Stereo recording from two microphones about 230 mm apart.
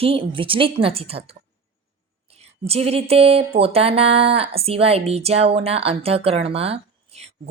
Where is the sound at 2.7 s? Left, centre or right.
Right.